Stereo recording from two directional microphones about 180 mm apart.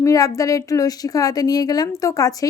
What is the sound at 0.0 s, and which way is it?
A woman's voice, 20° left (ahead or behind).